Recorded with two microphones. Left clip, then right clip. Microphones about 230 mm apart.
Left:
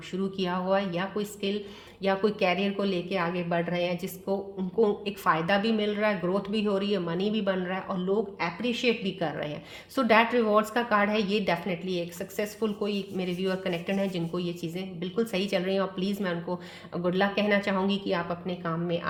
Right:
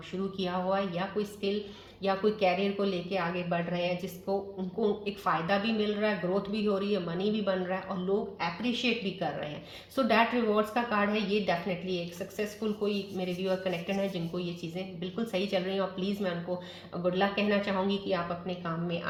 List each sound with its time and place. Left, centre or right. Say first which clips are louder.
0.3 s a woman's voice: left 3 dB; left